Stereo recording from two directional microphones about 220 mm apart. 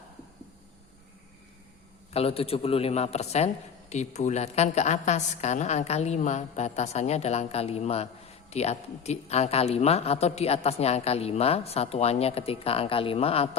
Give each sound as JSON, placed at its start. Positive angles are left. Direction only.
{"t": 2.1, "sound": "a man's voice", "side_deg": 25}